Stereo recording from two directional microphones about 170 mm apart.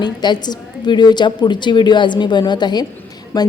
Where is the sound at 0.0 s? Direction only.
25° left (ahead or behind).